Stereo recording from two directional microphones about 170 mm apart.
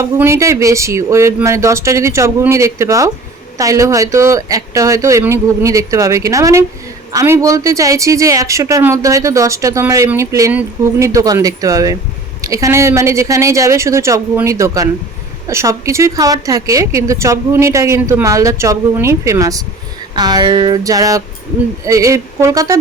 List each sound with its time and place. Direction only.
0.0 s speech: 15° right (ahead or behind)